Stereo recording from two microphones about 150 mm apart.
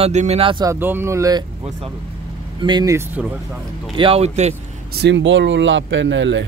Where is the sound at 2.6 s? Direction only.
30° right (ahead or behind).